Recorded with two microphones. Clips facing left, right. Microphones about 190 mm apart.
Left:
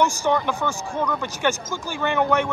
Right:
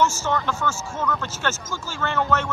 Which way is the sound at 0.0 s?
15° left (ahead or behind).